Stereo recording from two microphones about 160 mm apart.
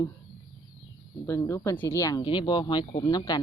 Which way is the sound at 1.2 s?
15° left (ahead or behind).